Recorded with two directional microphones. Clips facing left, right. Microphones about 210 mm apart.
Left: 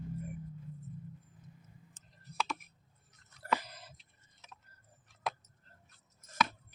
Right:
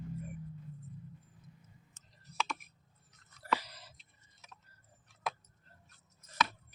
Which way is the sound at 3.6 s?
50° left (ahead or behind).